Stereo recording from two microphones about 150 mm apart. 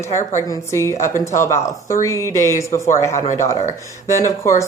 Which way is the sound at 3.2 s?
50° left (ahead or behind).